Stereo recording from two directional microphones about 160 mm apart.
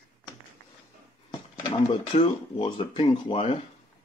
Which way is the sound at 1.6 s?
35° left (ahead or behind).